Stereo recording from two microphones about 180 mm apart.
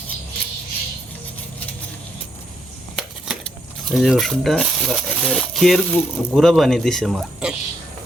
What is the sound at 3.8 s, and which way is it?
Speech, centre (ahead or behind).